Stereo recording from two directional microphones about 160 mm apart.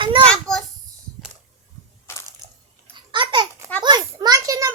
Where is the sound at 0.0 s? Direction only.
35° right (ahead or behind).